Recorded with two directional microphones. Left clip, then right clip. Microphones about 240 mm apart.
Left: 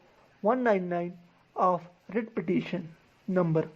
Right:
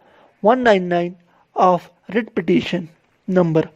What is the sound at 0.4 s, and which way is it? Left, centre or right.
A woman's voice, right.